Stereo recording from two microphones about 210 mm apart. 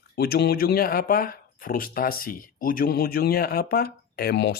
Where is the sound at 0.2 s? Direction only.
50° left (ahead or behind).